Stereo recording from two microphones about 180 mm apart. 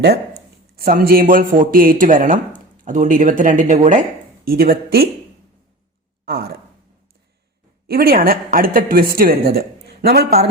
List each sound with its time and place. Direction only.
0.8 s a man's voice: 55° right (ahead or behind)
4.4 s a woman's voice: 60° right (ahead or behind)
6.2 s a woman's voice: 60° right (ahead or behind)
7.9 s a woman's voice: 55° right (ahead or behind)